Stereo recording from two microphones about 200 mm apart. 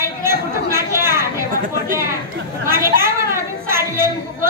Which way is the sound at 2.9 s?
45° right (ahead or behind).